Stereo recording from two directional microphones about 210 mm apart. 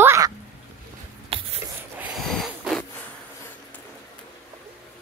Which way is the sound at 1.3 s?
25° right (ahead or behind).